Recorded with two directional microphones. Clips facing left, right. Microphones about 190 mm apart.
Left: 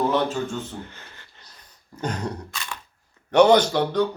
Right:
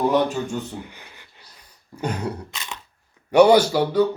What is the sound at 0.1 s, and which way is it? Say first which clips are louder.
Speech: right 3 dB; 15° right (ahead or behind).